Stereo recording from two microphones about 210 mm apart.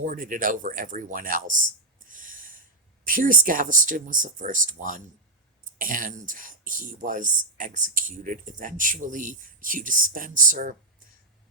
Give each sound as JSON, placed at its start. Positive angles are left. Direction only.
{"t": 0.0, "sound": "speech", "side_deg": -40}
{"t": 2.0, "sound": "snort", "side_deg": -40}
{"t": 3.0, "sound": "speech", "side_deg": -40}